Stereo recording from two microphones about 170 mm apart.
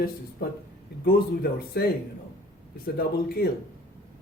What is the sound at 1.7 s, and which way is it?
Speech, 70° left (ahead or behind).